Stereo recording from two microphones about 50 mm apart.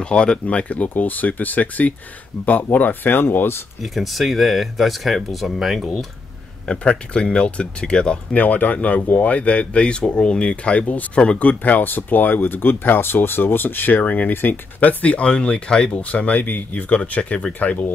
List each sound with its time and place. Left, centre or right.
0.0 s speech: centre; by 3.6 s left
3.8 s speech: centre
6.7 s speech: centre